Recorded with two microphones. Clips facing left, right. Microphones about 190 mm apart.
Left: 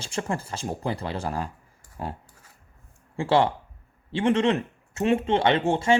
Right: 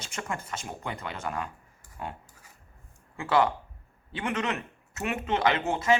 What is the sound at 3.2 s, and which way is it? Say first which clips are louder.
Speech: left 3 dB; 30° left (ahead or behind).